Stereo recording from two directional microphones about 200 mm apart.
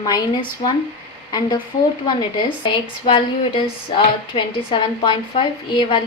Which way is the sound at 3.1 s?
25° left (ahead or behind).